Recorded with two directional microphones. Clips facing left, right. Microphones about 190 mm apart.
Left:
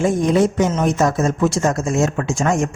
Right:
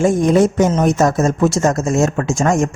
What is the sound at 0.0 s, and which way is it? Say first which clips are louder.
Speech: right 3 dB; 45° right (ahead or behind).